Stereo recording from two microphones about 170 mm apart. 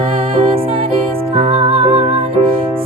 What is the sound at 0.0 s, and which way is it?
Music, 30° right (ahead or behind).